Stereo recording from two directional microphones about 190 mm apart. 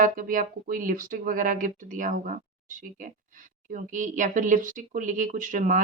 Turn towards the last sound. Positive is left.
turn(degrees=-40)  # may be behind; listen again after turning